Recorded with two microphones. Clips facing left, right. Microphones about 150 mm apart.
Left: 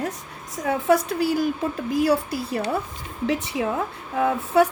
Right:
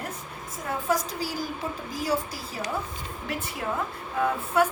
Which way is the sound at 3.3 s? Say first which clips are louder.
Left 9 dB; 80° left.